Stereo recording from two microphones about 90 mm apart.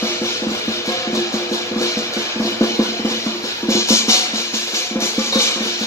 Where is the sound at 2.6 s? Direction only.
30° left (ahead or behind).